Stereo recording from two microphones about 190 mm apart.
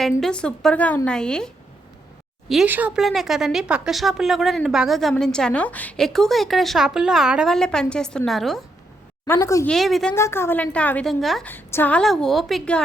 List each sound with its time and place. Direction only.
0.2 s speech: 5° left (ahead or behind)
2.5 s speech: 5° right (ahead or behind)
9.2 s a woman's voice: 15° left (ahead or behind)
9.6 s speech: centre (ahead or behind)
10.2 s speech: 15° left (ahead or behind)